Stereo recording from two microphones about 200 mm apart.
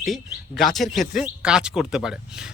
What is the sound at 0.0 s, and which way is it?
Speech, centre (ahead or behind).